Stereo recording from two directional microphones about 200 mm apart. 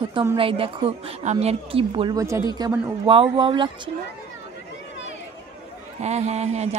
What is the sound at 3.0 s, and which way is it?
Speech, 25° right (ahead or behind).